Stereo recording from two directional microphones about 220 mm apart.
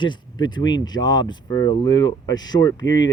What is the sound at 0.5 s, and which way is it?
Speech, 20° left (ahead or behind).